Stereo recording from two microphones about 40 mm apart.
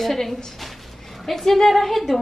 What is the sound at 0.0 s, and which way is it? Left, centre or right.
A woman's voice, centre.